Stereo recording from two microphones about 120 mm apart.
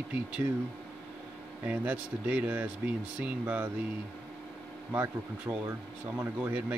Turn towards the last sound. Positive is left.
turn(degrees=-10)  # may be behind; listen again after turning